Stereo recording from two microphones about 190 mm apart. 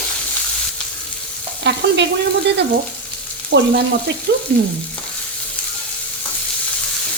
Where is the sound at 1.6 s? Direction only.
65° right (ahead or behind).